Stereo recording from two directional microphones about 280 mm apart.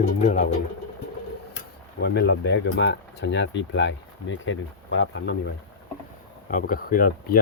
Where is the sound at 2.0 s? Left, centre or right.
Left.